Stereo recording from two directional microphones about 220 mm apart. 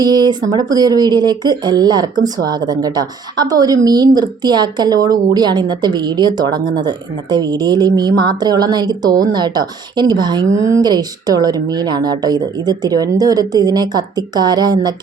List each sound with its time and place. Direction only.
0.0 s a woman's voice: 20° right (ahead or behind)